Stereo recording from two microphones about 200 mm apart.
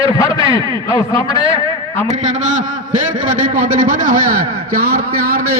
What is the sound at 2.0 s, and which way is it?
A man's voice, 35° right (ahead or behind).